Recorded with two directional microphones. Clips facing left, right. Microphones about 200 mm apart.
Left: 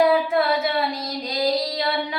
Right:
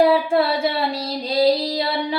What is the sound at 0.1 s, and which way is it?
Child singing, 30° right (ahead or behind).